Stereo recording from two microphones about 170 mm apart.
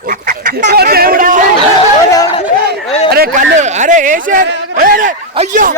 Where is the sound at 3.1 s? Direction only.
65° right (ahead or behind).